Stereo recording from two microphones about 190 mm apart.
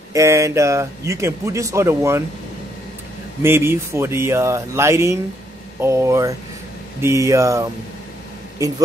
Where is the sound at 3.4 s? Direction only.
10° right (ahead or behind).